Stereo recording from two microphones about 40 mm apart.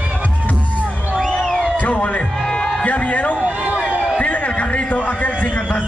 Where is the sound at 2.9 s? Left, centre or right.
Left.